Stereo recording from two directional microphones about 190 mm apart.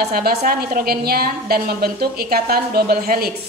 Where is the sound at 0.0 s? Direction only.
55° right (ahead or behind).